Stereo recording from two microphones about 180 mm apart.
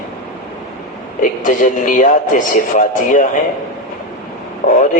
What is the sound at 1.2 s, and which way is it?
A man's voice, 45° left (ahead or behind).